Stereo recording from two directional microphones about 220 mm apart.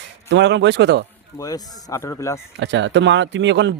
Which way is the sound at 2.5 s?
55° right (ahead or behind).